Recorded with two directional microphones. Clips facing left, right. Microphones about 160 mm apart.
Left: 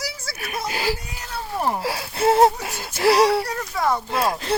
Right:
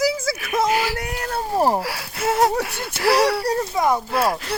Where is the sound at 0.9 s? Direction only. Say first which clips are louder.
Right 8 dB; 65° right (ahead or behind).